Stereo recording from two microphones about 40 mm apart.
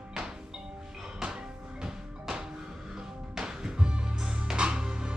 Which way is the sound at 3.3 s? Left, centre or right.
Centre.